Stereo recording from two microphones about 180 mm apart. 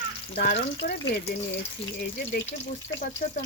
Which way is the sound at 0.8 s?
70° left (ahead or behind).